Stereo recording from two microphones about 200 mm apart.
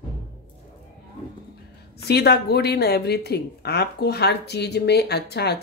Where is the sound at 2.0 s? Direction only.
55° left (ahead or behind).